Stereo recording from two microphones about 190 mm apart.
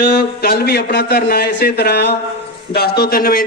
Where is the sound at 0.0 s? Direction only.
55° left (ahead or behind).